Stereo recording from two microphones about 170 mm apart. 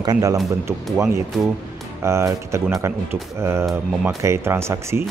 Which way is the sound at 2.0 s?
15° right (ahead or behind).